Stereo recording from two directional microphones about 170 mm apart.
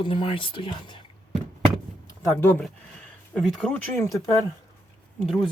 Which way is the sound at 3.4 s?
Centre (ahead or behind).